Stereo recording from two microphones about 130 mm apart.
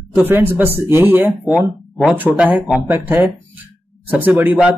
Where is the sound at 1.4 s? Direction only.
Centre (ahead or behind).